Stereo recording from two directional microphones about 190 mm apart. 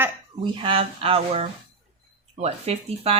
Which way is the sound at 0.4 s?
25° right (ahead or behind).